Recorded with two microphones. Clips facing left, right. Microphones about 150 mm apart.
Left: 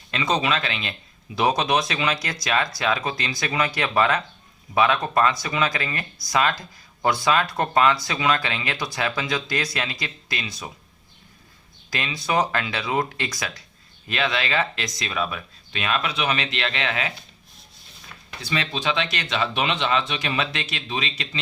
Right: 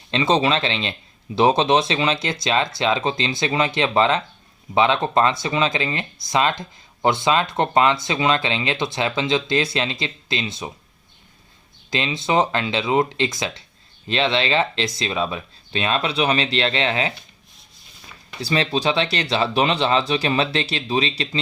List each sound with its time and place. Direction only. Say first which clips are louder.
0.1 s speech: right 5 dB; 30° right (ahead or behind)
11.9 s speech: right 4 dB; 25° right (ahead or behind)
18.4 s speech: right 5 dB; 35° right (ahead or behind)